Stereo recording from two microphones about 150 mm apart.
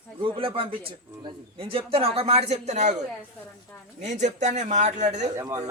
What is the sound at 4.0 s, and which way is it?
A man's voice, 50° right (ahead or behind).